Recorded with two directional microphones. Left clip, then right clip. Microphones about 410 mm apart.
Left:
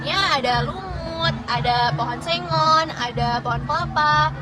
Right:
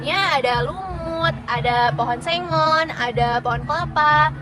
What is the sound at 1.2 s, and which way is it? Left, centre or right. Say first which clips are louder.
Music: even; centre.